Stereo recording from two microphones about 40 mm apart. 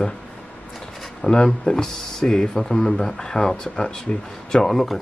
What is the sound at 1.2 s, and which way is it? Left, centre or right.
Speech, centre.